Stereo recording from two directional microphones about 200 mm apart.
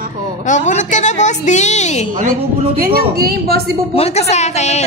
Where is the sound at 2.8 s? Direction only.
50° right (ahead or behind).